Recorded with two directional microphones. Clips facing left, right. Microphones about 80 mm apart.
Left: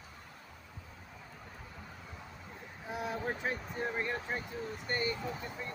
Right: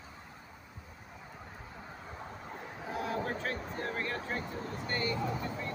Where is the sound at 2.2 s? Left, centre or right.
Right.